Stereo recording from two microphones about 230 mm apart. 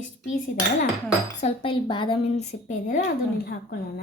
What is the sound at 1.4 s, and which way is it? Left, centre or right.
Speech, left.